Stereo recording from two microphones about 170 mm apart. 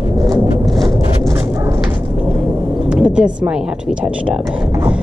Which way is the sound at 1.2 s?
15° right (ahead or behind).